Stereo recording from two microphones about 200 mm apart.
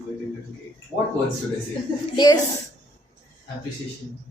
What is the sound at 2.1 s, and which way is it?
Speech, 20° left (ahead or behind).